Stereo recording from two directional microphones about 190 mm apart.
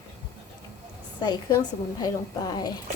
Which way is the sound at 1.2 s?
20° left (ahead or behind).